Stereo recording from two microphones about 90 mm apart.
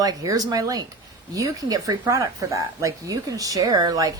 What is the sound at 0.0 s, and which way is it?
A woman's voice, 45° right (ahead or behind).